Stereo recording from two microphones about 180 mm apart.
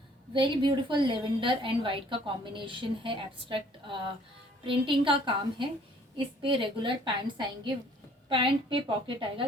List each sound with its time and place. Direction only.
0.3 s a woman's voice: 25° right (ahead or behind)